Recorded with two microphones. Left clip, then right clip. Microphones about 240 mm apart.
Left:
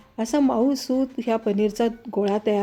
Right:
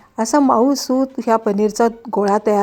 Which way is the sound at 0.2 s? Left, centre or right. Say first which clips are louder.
Right 7 dB; centre.